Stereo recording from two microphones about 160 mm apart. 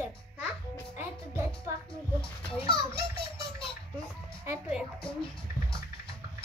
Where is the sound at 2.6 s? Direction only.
35° left (ahead or behind).